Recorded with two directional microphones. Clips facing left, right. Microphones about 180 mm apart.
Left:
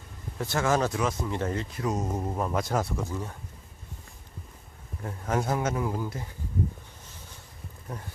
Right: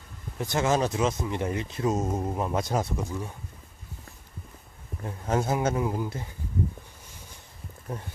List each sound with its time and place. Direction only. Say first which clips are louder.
0.3 s speech: right 1 dB; 20° right (ahead or behind)
5.0 s speech: right 1 dB; 25° right (ahead or behind)
7.9 s speech: right 3 dB; 25° right (ahead or behind)